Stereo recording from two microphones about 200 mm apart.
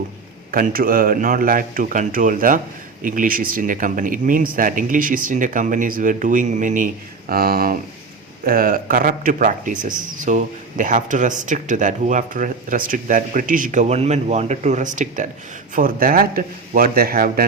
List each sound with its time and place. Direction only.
0.5 s a man's voice: 45° right (ahead or behind)